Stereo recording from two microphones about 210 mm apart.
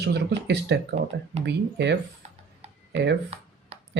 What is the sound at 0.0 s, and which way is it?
Speech, 55° right (ahead or behind).